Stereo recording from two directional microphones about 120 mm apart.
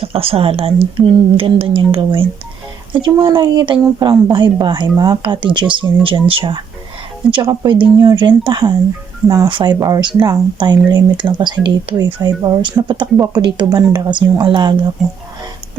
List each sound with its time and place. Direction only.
0.0 s a woman's voice: 55° right (ahead or behind); by 9.5 s 30° right (ahead or behind)
9.5 s a woman's voice: 40° right (ahead or behind)